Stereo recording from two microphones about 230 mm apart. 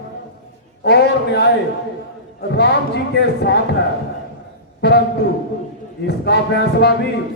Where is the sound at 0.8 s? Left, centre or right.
Left.